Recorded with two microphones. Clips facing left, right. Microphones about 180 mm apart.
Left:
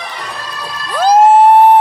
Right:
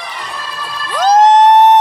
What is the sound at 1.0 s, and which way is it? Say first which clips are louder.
Music: left 1 dB; 10° left (ahead or behind).